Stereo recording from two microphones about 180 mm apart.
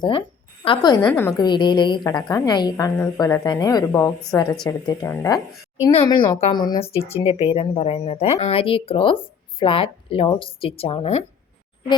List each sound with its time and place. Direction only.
0.6 s a woman's voice: 25° left (ahead or behind)
1.0 s a woman's voice: 10° left (ahead or behind)
5.9 s a woman's voice: 30° left (ahead or behind)